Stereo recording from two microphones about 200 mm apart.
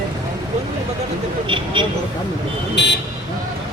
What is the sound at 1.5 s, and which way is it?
Speech, 25° right (ahead or behind).